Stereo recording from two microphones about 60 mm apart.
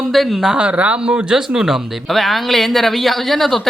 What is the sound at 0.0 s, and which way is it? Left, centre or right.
Speech, centre.